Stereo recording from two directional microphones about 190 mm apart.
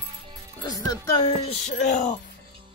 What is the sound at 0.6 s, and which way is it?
Speech, 20° left (ahead or behind).